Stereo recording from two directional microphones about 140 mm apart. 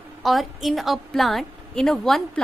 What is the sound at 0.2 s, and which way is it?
A woman's voice, centre (ahead or behind).